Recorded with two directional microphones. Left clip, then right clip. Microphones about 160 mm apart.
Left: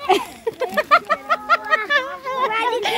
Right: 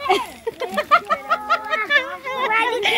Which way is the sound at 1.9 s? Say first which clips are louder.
Right 1 dB; 20° left (ahead or behind).